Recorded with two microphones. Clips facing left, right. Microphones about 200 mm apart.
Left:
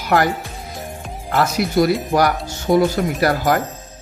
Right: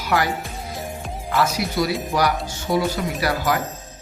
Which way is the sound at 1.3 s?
55° left (ahead or behind).